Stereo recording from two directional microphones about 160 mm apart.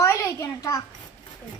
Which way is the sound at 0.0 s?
20° left (ahead or behind).